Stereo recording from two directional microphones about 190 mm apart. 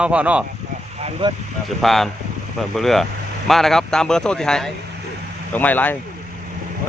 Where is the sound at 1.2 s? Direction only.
25° right (ahead or behind).